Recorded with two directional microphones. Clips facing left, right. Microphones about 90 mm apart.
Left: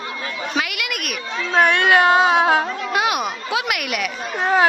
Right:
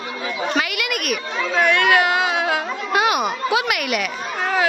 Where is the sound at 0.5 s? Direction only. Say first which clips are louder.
Right 2 dB; centre (ahead or behind).